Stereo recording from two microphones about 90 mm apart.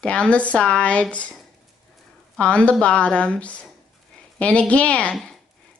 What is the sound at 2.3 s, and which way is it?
A woman's voice, 15° left (ahead or behind).